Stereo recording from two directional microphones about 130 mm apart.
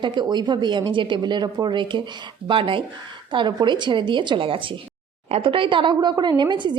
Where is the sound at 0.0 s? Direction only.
35° right (ahead or behind).